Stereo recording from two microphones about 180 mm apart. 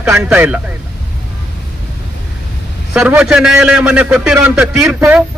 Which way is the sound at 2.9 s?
5° right (ahead or behind).